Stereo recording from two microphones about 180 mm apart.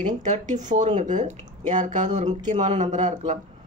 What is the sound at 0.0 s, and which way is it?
Speech, 40° right (ahead or behind).